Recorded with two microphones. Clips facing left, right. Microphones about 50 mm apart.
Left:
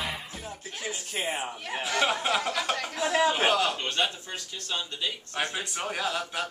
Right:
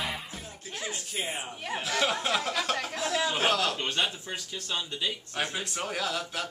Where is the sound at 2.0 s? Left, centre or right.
Centre.